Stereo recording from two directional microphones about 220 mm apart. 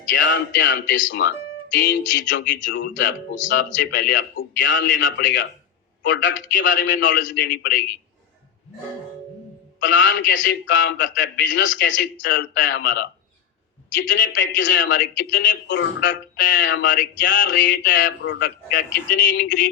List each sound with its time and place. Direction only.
0.1 s a man's voice: 55° left (ahead or behind)
1.7 s a sound: 55° left (ahead or behind)
3.8 s a man's voice: 55° left (ahead or behind)
7.3 s a sound: 50° left (ahead or behind)
9.8 s a man's voice: 55° left (ahead or behind)
14.1 s a man's voice: 55° left (ahead or behind)